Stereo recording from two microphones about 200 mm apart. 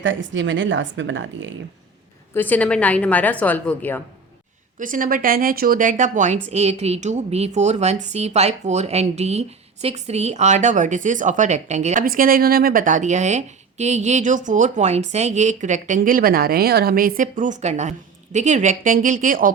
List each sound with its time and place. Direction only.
0.0 s a woman's voice: 65° right (ahead or behind)
2.3 s a woman's voice: 10° left (ahead or behind)
4.8 s speech: 40° right (ahead or behind)